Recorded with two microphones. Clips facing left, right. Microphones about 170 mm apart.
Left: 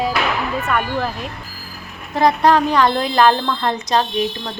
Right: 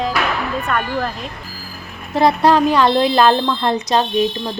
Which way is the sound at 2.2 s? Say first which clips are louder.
Right 1 dB; 20° left (ahead or behind).